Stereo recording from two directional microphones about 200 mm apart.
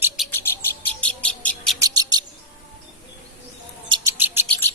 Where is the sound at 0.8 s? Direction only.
5° left (ahead or behind).